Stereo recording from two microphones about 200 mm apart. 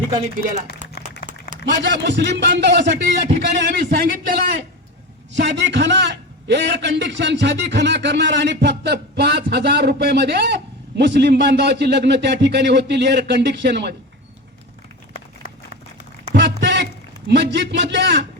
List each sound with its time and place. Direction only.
0.1 s speech: 35° right (ahead or behind)
0.9 s a sound: 50° left (ahead or behind)
1.6 s a man's voice: 60° right (ahead or behind)
5.3 s a man's voice: 65° right (ahead or behind)
16.3 s a sound: 60° right (ahead or behind)
17.2 s a man's voice: 60° right (ahead or behind)